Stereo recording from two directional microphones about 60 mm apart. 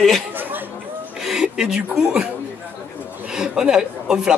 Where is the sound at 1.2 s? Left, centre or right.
Centre.